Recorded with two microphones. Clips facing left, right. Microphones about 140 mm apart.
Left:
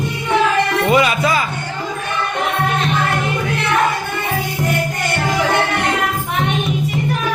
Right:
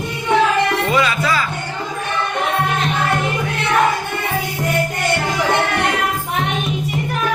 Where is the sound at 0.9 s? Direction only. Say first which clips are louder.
Left 3 dB; 20° left (ahead or behind).